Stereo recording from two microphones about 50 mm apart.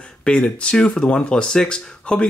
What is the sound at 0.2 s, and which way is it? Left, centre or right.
Speech, left.